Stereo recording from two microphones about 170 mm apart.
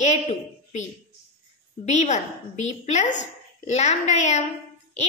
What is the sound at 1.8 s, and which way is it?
A woman's voice, 45° left (ahead or behind).